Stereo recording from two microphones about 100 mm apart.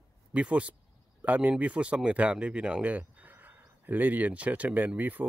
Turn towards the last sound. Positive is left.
turn(degrees=-15)  # may be behind; listen again after turning